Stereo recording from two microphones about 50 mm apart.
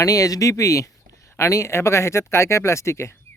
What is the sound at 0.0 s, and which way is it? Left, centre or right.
Speech, left.